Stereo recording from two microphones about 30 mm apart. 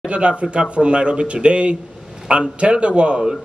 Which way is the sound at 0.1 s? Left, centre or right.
Right.